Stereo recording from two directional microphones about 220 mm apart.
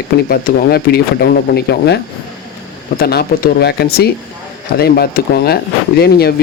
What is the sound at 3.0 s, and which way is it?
Speech, 45° left (ahead or behind).